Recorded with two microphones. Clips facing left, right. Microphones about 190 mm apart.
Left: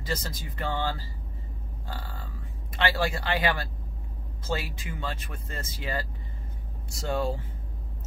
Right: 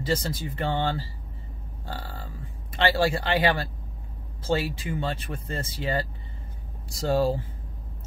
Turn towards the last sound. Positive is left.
turn(degrees=-35)  # may be behind; listen again after turning